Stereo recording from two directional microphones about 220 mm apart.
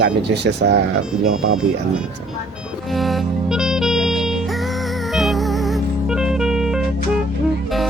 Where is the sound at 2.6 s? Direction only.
Centre (ahead or behind).